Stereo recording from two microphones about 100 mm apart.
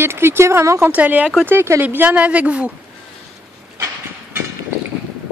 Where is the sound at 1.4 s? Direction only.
25° right (ahead or behind).